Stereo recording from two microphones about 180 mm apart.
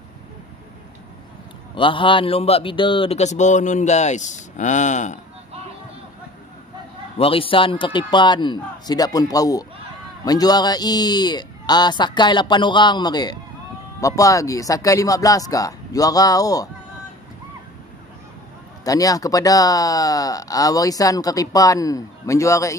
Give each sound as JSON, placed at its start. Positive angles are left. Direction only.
{"t": 1.8, "sound": "speech", "side_deg": 30}
{"t": 7.2, "sound": "speech", "side_deg": 30}
{"t": 18.9, "sound": "speech", "side_deg": 20}